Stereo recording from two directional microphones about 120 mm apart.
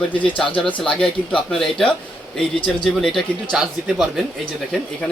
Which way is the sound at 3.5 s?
5° right (ahead or behind).